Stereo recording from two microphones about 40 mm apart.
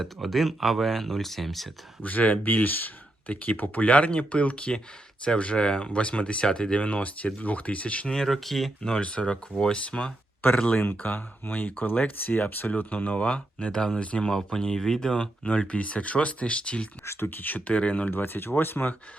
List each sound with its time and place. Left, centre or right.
0.0 s speech: centre
2.0 s speech: left
6.7 s speech: left
8.0 s speech: centre
8.8 s speech: centre
11.0 s speech: left
13.2 s speech: left
14.0 s speech: left
14.3 s speech: centre
15.2 s speech: left
17.1 s speech: left
18.1 s speech: left